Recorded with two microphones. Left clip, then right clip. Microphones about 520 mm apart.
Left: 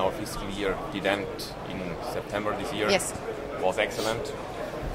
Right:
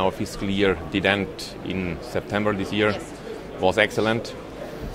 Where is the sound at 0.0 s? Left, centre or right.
Right.